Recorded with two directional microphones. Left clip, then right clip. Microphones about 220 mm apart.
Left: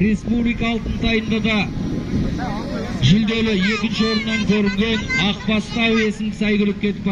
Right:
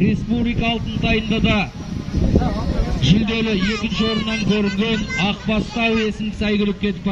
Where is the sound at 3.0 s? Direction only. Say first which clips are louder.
Left 1 dB; 15° right (ahead or behind).